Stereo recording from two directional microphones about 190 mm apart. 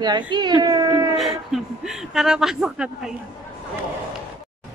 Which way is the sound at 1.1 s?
Centre (ahead or behind).